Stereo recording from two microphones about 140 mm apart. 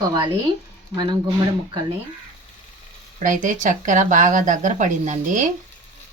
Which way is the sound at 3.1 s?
65° right (ahead or behind).